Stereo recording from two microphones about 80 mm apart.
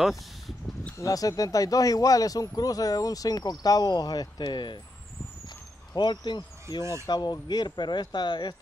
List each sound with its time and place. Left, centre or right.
0.9 s speech: left
5.9 s speech: left